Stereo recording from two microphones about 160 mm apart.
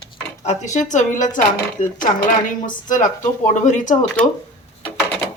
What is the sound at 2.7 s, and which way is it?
Speech, 55° left (ahead or behind).